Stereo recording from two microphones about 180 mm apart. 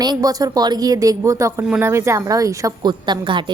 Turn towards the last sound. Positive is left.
turn(degrees=-25)  # may be behind; listen again after turning